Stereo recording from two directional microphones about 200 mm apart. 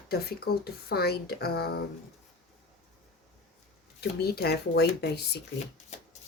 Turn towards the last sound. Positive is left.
turn(degrees=55)  # may be behind; listen again after turning